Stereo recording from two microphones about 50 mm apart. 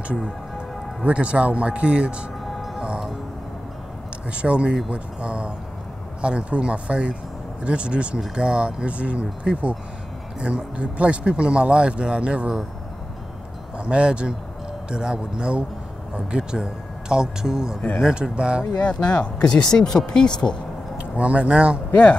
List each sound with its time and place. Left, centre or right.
1.0 s speech: right
2.4 s music: centre
4.3 s speech: right
13.7 s speech: right
18.9 s speech: left
21.0 s speech: right